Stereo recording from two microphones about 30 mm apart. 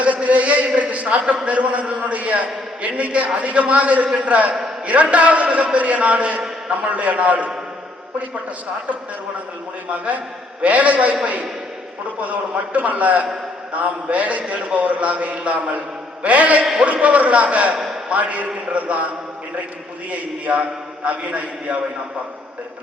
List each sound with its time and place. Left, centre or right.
0.0 s a sound: right
1.3 s a man's voice: right
10.6 s a man's voice: right
12.2 s a man's voice: right
20.1 s a man's voice: right